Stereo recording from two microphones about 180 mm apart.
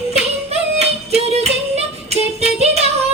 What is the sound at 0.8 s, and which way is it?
Music, 35° right (ahead or behind).